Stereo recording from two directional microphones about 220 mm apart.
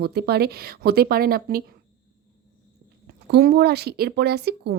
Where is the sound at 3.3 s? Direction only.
45° right (ahead or behind).